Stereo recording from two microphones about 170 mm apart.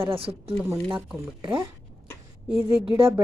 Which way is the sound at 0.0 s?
35° right (ahead or behind).